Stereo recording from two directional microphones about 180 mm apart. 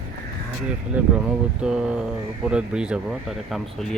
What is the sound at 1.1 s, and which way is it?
Speech, 5° right (ahead or behind).